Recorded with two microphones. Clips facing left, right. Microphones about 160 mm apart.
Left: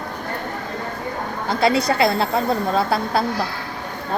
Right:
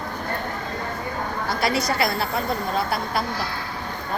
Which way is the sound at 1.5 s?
25° left (ahead or behind).